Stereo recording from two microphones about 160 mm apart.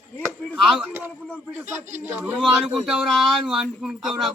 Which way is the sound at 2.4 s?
Centre (ahead or behind).